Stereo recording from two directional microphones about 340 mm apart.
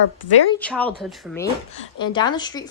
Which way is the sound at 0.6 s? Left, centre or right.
Centre.